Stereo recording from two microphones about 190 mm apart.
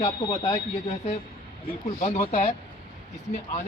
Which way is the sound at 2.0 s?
35° left (ahead or behind).